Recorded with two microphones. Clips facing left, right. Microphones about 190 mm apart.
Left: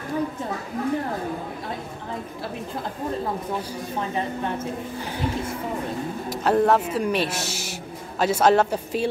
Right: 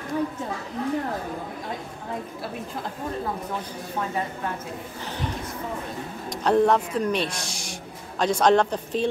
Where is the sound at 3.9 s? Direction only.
25° left (ahead or behind).